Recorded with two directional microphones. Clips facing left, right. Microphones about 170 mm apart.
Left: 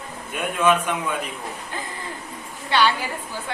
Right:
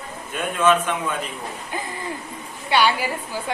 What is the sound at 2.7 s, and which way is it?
Speech, 10° right (ahead or behind).